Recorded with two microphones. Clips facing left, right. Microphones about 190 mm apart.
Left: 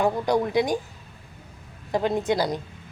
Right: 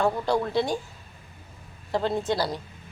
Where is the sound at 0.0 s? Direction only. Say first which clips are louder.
Left 2 dB; 15° left (ahead or behind).